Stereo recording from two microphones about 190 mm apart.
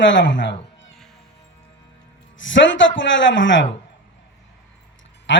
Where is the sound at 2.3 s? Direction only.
80° left.